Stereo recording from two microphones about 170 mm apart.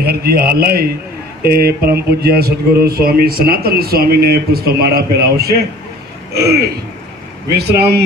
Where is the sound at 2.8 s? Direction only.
65° right (ahead or behind).